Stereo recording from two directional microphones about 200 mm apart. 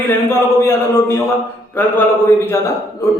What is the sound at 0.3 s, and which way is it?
A man's voice, 10° left (ahead or behind).